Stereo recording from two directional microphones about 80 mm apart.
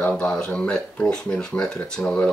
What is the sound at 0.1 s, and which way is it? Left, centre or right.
Speech, centre.